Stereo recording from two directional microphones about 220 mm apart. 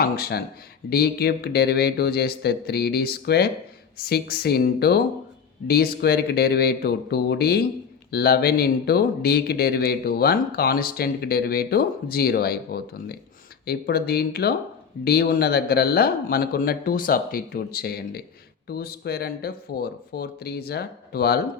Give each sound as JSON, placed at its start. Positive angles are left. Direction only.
{"t": 0.0, "sound": "speech", "side_deg": 45}